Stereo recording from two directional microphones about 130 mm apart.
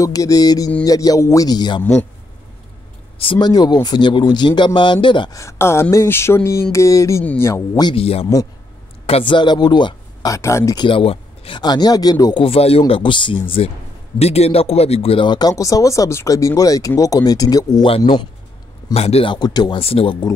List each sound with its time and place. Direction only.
0.0 s a man's voice: 25° left (ahead or behind)
3.2 s speech: 40° left (ahead or behind)
5.3 s a man's voice: 20° left (ahead or behind)
7.9 s speech: 50° left (ahead or behind)
10.3 s a man's voice: 25° left (ahead or behind)
10.9 s speech: 45° left (ahead or behind)
12.4 s speech: 50° left (ahead or behind)
14.1 s a man's voice: 55° left (ahead or behind); by 17.8 s 30° left (ahead or behind)
17.8 s speech: 40° left (ahead or behind)
18.9 s speech: 50° left (ahead or behind)
19.3 s speech: 35° left (ahead or behind)
19.8 s speech: 45° left (ahead or behind)